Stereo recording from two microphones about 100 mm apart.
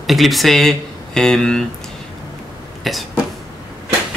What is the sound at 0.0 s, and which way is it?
Speech, centre (ahead or behind).